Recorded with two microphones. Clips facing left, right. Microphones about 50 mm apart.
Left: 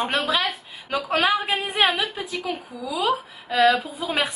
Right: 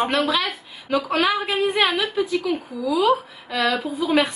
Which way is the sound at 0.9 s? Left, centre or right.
Centre.